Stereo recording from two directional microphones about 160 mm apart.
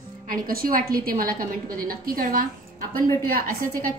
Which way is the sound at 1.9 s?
65° right (ahead or behind).